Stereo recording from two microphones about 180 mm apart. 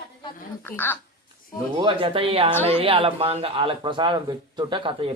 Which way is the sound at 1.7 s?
30° right (ahead or behind).